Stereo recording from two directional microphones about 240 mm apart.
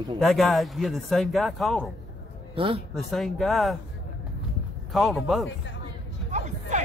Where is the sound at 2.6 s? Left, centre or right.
Right.